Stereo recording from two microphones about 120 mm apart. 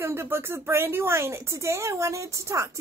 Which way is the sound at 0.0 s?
20° right (ahead or behind).